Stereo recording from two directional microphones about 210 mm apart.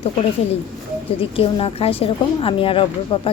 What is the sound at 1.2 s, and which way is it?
Speech, 25° left (ahead or behind).